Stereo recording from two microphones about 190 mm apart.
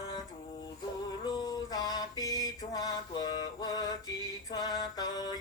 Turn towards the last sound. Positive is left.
turn(degrees=20)  # may be behind; listen again after turning